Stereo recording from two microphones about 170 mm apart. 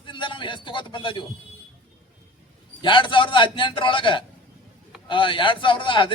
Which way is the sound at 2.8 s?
30° left (ahead or behind).